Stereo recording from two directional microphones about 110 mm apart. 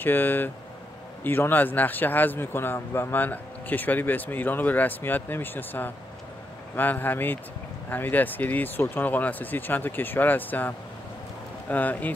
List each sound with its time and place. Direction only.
0.0 s speech: 20° left (ahead or behind)
11.7 s speech: 15° left (ahead or behind)